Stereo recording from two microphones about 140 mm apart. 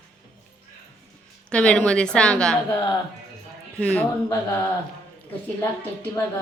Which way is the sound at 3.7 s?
10° left (ahead or behind).